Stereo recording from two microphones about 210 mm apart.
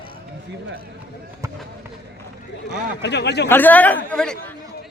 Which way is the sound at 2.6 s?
55° left (ahead or behind).